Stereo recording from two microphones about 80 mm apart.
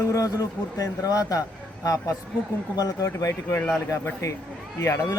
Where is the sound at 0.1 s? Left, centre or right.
Left.